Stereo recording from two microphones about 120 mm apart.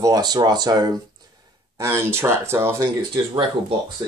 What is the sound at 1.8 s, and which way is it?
Speech, 20° right (ahead or behind).